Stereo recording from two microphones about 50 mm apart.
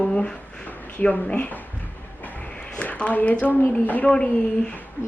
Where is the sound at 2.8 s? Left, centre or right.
Left.